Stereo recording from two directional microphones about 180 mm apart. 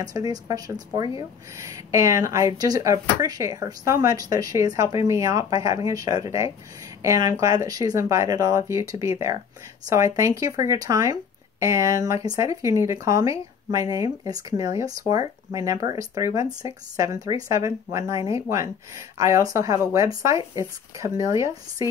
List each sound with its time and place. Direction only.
0.0 s speech: 20° right (ahead or behind)